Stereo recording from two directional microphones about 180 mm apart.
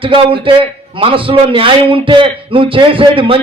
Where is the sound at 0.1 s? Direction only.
30° right (ahead or behind).